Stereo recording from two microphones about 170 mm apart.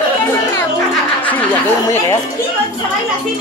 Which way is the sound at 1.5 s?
15° left (ahead or behind).